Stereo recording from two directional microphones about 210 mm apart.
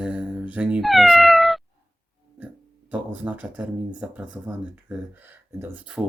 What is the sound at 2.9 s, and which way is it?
Speech, 5° right (ahead or behind).